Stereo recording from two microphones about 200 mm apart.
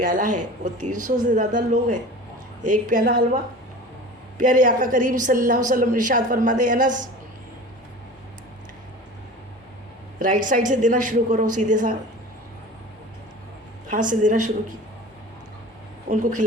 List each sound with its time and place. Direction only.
0.0 s a woman's voice: 40° right (ahead or behind)
4.4 s a woman's voice: 40° right (ahead or behind)
10.2 s a woman's voice: 40° right (ahead or behind)
13.9 s a woman's voice: 40° right (ahead or behind)
16.0 s speech: 40° right (ahead or behind)